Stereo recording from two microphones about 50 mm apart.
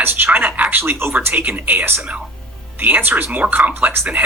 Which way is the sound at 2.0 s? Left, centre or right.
Right.